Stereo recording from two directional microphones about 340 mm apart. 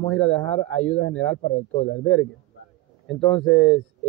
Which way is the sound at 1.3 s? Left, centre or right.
Left.